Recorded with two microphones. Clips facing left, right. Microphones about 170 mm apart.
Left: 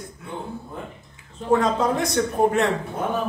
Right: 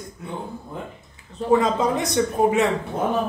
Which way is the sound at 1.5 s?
Centre (ahead or behind).